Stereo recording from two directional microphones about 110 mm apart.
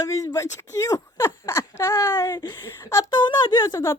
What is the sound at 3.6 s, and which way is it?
Speech, 25° left (ahead or behind).